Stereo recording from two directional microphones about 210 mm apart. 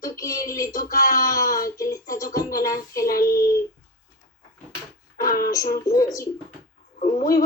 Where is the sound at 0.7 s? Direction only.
40° left (ahead or behind).